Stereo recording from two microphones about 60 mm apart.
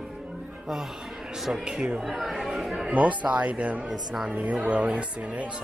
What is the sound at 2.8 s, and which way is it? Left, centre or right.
Speech, right.